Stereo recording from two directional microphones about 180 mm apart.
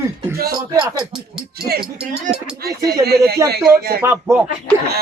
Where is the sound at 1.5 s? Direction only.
60° right (ahead or behind).